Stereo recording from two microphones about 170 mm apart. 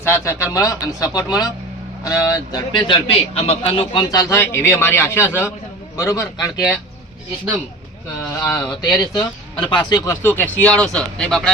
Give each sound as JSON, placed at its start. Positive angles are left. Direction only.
{"t": 0.0, "sound": "a man's voice", "side_deg": 15}
{"t": 8.2, "sound": "a man's voice", "side_deg": 20}
{"t": 10.2, "sound": "speech", "side_deg": 10}